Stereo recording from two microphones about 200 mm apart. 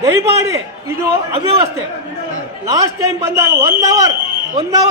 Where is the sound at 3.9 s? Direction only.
20° right (ahead or behind).